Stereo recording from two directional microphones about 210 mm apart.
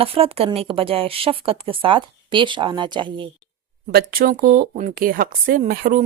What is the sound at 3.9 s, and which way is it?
Speech, 45° right (ahead or behind).